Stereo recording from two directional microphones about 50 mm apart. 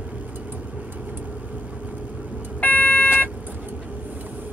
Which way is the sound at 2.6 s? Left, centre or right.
Left.